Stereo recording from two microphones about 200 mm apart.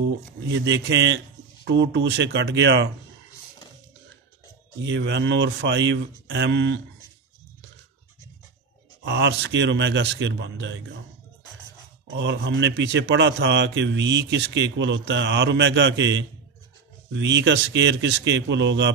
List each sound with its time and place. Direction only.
0.5 s a man's voice: 60° right (ahead or behind)
4.8 s a man's voice: 60° right (ahead or behind)
9.0 s a man's voice: 60° right (ahead or behind)
12.2 s a man's voice: 60° right (ahead or behind)